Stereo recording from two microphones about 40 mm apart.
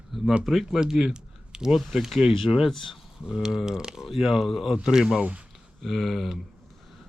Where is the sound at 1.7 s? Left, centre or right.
Centre.